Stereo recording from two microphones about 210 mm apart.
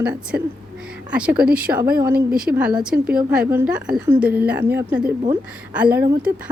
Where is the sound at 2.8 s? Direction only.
5° right (ahead or behind).